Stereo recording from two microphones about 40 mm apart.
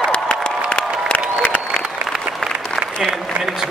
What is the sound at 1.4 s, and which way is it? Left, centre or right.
Applause, left.